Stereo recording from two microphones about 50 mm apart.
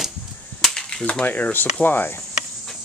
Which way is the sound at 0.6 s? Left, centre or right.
Centre.